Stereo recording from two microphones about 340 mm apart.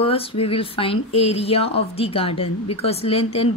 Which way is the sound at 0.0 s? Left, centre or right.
Centre.